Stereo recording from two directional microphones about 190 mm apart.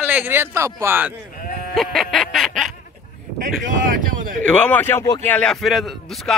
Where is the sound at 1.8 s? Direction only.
Centre (ahead or behind).